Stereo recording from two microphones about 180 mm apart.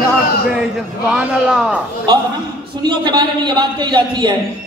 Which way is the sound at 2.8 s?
25° right (ahead or behind).